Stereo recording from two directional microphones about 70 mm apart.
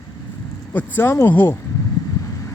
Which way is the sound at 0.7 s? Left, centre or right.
Left.